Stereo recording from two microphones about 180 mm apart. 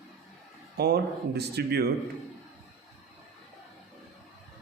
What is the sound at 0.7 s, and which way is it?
Speech, 65° right (ahead or behind).